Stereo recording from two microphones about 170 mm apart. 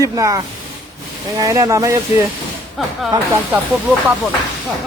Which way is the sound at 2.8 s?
Centre (ahead or behind).